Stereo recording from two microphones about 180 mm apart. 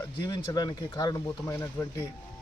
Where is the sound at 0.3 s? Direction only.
20° left (ahead or behind).